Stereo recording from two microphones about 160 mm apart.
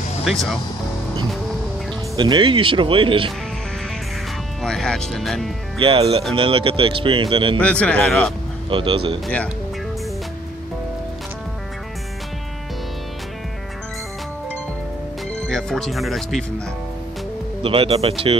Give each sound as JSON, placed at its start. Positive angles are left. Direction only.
{"t": 0.2, "sound": "speech", "side_deg": 0}
{"t": 2.1, "sound": "speech", "side_deg": -30}
{"t": 4.6, "sound": "speech", "side_deg": 5}
{"t": 5.8, "sound": "speech", "side_deg": -35}
{"t": 7.5, "sound": "speech", "side_deg": 10}
{"t": 8.6, "sound": "speech", "side_deg": -30}
{"t": 15.4, "sound": "speech", "side_deg": 0}
{"t": 17.6, "sound": "speech", "side_deg": -35}